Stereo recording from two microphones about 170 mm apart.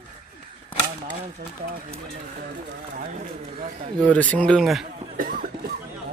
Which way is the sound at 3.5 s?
50° right (ahead or behind).